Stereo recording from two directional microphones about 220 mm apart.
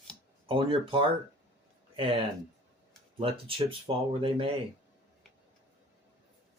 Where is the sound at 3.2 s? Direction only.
25° right (ahead or behind).